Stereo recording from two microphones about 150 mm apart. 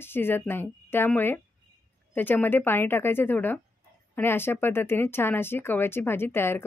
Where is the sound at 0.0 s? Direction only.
15° left (ahead or behind).